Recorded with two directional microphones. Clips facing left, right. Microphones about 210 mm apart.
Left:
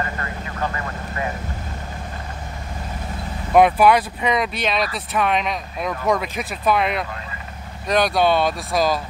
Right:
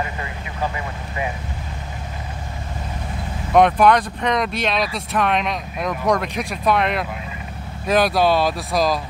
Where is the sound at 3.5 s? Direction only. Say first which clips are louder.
Even; 5° left (ahead or behind).